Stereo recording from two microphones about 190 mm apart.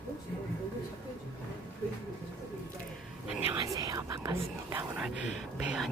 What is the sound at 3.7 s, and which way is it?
Whispering, 20° right (ahead or behind).